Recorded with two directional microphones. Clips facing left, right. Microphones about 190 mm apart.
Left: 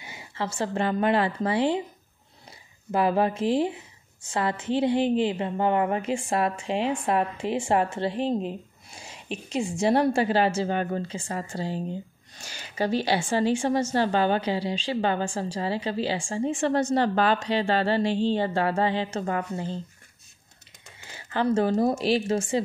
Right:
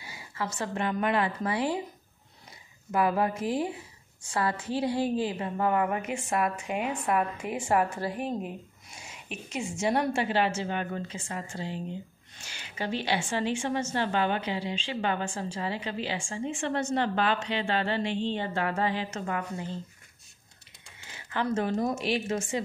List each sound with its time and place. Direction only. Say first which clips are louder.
0.0 s a woman's voice: left 3 dB; 25° left (ahead or behind)
2.9 s a woman's voice: left 3 dB; 30° left (ahead or behind)
21.3 s a woman's voice: left 5 dB; 30° left (ahead or behind)